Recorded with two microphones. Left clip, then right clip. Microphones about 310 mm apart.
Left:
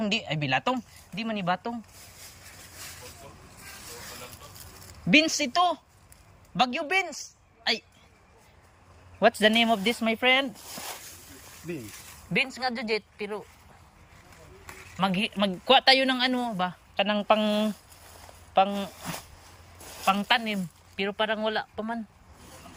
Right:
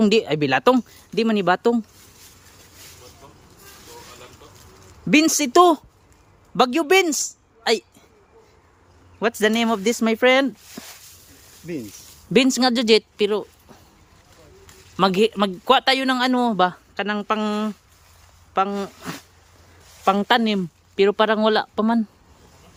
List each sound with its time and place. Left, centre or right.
0.0 s a man's voice: centre
5.1 s a man's voice: centre
9.1 s a man's voice: centre
12.3 s speech: right
14.9 s a man's voice: centre